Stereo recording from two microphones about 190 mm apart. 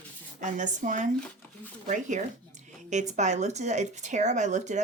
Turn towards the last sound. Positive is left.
turn(degrees=-40)  # may be behind; listen again after turning